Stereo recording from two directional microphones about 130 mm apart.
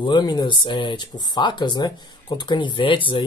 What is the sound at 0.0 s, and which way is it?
Speech, 35° left (ahead or behind).